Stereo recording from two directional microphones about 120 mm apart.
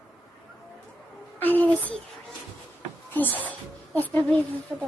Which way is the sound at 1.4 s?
15° left (ahead or behind).